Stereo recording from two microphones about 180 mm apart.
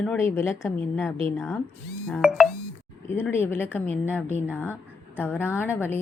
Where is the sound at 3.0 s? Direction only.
10° left (ahead or behind).